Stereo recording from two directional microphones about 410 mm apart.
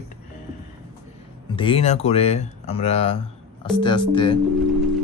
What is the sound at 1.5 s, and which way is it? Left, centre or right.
Speech, centre.